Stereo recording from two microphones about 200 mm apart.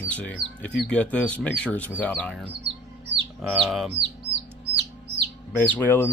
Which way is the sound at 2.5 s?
55° right (ahead or behind).